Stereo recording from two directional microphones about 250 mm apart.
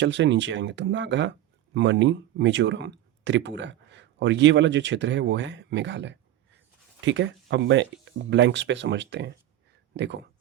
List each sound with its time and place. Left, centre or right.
0.0 s speech: right